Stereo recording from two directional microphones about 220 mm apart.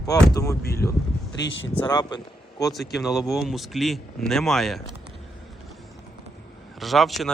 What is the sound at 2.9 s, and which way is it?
Speech, centre (ahead or behind).